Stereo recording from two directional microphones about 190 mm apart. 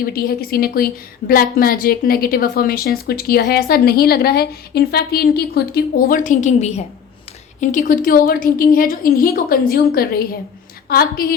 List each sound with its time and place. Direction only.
0.0 s a woman's voice: 50° left (ahead or behind)